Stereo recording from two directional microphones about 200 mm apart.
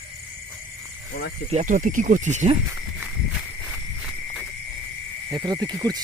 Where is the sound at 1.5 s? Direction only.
40° right (ahead or behind).